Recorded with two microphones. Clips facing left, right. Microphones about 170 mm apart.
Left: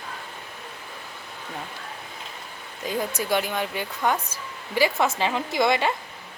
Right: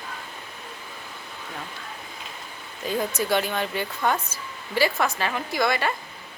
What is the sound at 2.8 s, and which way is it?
Speech, 10° left (ahead or behind).